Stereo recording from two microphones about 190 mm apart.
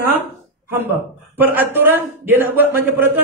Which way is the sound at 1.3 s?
10° right (ahead or behind).